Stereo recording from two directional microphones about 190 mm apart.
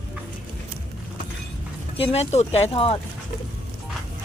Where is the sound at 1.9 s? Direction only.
30° left (ahead or behind).